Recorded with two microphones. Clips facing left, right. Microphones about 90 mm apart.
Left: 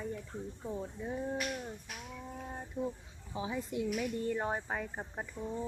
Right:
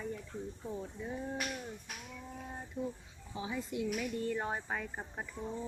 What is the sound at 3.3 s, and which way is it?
A woman's voice, 25° left (ahead or behind).